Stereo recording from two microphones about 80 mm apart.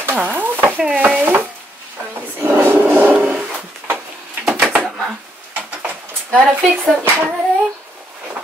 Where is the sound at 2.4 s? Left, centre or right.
Right.